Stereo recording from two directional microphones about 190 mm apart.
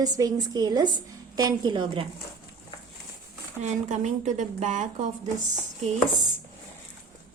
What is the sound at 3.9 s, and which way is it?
A woman's voice, 40° right (ahead or behind).